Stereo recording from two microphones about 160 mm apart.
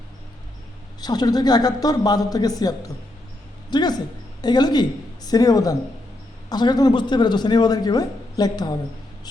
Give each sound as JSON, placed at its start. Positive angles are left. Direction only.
{"t": 1.0, "sound": "a woman's voice", "side_deg": 25}